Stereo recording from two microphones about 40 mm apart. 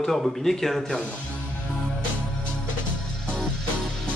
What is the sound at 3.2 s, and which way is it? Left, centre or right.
Music, left.